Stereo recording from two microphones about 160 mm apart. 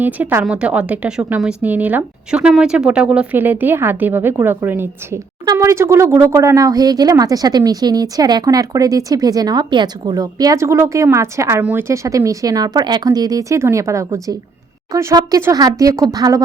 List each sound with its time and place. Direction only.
0.0 s speech: 15° right (ahead or behind)